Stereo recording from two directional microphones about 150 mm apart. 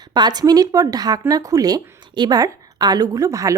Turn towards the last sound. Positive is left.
turn(degrees=-20)  # may be behind; listen again after turning